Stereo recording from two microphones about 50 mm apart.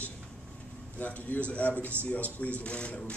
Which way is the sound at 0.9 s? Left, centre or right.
Left.